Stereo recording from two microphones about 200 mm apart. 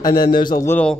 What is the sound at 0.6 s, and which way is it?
Speech, 10° left (ahead or behind).